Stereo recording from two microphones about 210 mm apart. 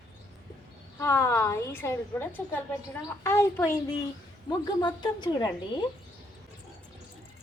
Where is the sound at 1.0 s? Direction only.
15° left (ahead or behind).